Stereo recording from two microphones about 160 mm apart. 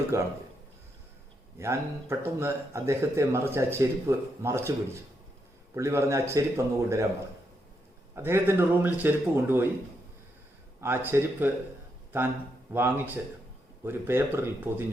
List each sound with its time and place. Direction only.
0.1 s speech: 20° right (ahead or behind)
1.5 s speech: 15° right (ahead or behind)
8.1 s speech: 15° right (ahead or behind)
10.8 s speech: 15° right (ahead or behind)